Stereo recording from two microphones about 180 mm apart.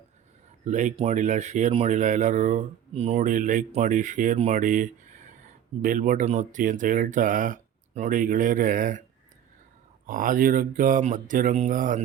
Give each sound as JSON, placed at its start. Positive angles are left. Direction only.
{"t": 0.6, "sound": "speech", "side_deg": -45}
{"t": 10.1, "sound": "speech", "side_deg": -50}